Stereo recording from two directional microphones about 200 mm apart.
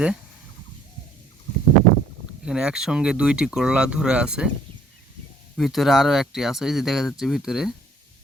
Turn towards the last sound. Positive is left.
turn(degrees=0)  # may be behind; listen again after turning